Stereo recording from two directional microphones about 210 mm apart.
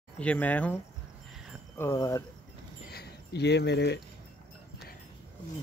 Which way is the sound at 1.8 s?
15° left (ahead or behind).